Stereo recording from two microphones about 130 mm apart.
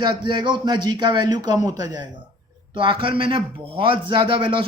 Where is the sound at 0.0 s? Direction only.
35° right (ahead or behind).